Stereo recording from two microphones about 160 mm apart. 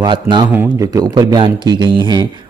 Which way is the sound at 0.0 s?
30° right (ahead or behind).